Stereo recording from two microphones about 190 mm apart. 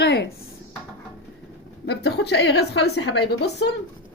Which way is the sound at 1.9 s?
60° left (ahead or behind).